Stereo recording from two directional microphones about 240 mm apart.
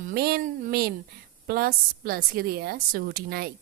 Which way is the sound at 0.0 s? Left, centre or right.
Right.